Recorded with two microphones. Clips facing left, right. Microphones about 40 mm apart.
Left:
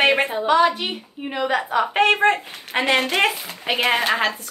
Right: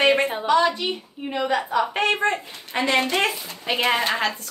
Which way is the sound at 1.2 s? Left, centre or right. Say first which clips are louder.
Left 1 dB; centre.